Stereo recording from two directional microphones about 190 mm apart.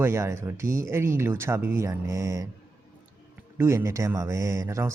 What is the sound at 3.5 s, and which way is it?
Speech, 15° right (ahead or behind).